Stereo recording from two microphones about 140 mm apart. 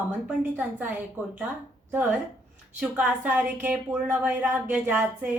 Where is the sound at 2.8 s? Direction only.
10° right (ahead or behind).